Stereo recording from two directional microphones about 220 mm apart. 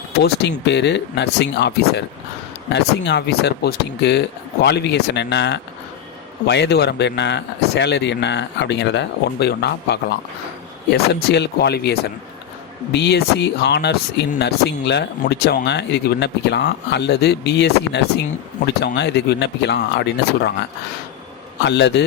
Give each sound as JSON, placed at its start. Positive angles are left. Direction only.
{"t": 0.2, "sound": "speech", "side_deg": 50}